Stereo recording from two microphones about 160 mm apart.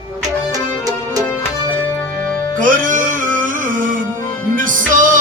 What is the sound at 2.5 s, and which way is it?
Music, 55° right (ahead or behind).